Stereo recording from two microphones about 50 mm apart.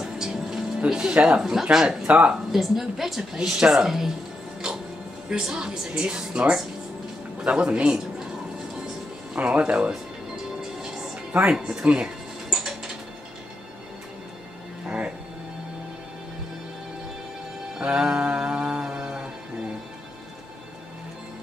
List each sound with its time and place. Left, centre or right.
0.0 s music: centre
0.8 s speech: centre
1.4 s speech: centre
2.0 s speech: right
2.5 s speech: centre
5.3 s speech: centre
9.3 s speech: right
10.3 s music: centre
14.9 s music: right
17.7 s music: centre